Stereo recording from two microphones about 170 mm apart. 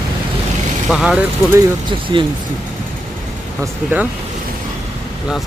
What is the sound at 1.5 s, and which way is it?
Speech, 30° right (ahead or behind).